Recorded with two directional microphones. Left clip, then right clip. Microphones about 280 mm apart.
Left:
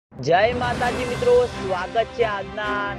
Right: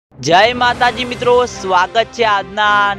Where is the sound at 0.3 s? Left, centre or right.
Right.